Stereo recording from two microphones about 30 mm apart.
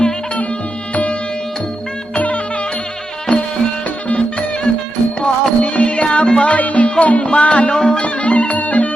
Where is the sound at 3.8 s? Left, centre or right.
Left.